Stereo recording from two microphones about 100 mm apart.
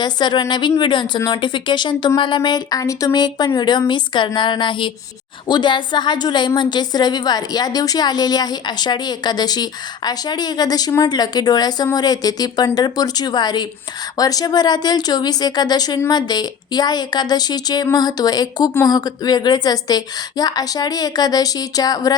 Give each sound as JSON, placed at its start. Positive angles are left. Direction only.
{"t": 0.0, "sound": "a woman's voice", "side_deg": 50}